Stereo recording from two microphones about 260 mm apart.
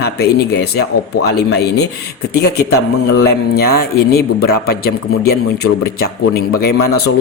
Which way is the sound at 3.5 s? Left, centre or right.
Left.